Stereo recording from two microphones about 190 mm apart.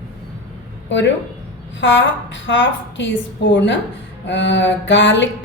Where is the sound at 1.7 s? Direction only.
75° left (ahead or behind).